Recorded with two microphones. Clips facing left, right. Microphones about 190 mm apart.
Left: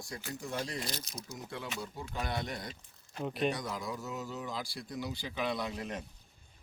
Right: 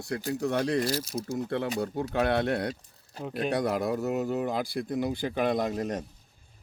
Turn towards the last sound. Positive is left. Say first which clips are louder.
# right 9 dB
turn(degrees=-45)  # may be behind; listen again after turning